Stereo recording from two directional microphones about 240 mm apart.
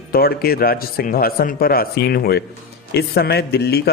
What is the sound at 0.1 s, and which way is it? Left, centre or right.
A man's voice, left.